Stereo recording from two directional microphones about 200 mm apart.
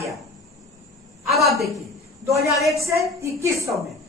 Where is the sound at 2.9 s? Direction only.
15° right (ahead or behind).